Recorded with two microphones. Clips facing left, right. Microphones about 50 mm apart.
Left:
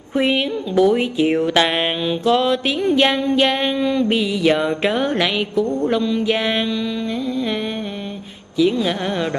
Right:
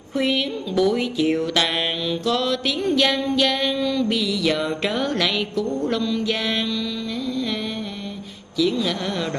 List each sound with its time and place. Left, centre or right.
0.1 s music: left
8.5 s music: left